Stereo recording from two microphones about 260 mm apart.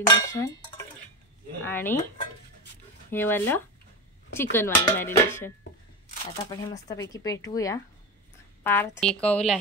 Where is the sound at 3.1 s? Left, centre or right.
Centre.